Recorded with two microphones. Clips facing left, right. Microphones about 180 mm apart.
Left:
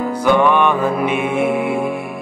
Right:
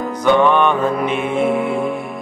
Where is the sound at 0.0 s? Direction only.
10° left (ahead or behind).